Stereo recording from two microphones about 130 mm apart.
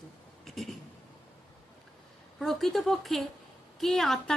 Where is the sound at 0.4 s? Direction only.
Centre (ahead or behind).